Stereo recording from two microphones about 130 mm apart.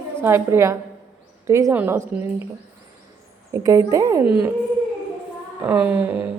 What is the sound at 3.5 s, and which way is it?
Speech, 25° right (ahead or behind).